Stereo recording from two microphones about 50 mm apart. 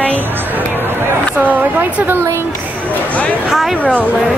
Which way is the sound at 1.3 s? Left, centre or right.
Right.